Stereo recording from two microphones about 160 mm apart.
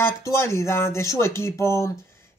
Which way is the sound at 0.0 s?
15° left (ahead or behind).